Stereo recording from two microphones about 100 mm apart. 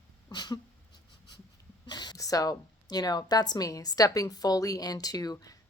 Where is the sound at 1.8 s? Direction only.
45° left (ahead or behind).